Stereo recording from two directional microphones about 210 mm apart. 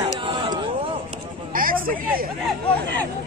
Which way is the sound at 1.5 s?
40° right (ahead or behind).